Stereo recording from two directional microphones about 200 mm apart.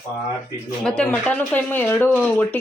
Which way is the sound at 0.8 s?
5° left (ahead or behind).